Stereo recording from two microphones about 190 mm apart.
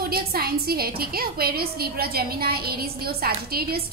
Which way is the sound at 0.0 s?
55° right (ahead or behind).